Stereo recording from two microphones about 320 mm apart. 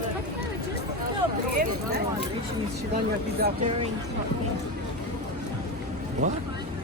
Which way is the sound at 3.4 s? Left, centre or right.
Right.